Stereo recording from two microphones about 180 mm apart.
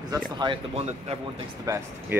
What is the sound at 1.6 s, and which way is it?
Speech, 15° right (ahead or behind).